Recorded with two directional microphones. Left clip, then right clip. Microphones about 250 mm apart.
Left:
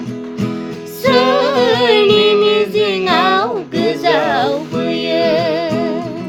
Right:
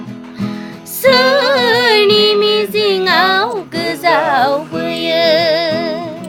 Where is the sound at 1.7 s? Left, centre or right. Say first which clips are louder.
Even; centre.